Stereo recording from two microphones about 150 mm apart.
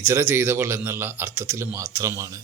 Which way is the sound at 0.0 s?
20° right (ahead or behind).